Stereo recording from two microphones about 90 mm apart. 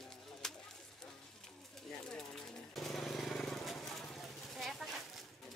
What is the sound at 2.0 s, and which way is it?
Vehicle, 5° left (ahead or behind).